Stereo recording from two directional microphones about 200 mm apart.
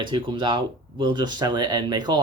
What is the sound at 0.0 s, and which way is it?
Speech, 25° right (ahead or behind).